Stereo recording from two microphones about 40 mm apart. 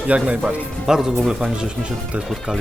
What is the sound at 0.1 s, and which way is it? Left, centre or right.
Speech, right.